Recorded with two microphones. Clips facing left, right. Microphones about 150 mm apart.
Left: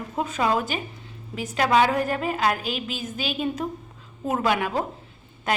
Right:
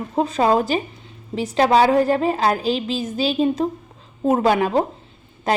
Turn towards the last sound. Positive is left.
turn(degrees=-30)  # may be behind; listen again after turning